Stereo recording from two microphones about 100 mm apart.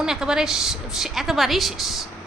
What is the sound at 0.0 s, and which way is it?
A woman's voice, 5° right (ahead or behind).